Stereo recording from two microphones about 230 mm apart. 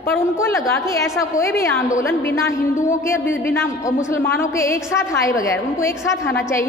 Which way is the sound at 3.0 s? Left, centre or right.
Centre.